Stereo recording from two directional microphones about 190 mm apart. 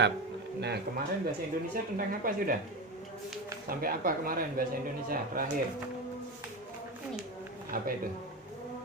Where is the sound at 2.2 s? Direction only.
50° right (ahead or behind).